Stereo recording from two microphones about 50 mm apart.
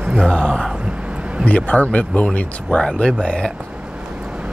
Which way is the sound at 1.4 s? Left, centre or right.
Left.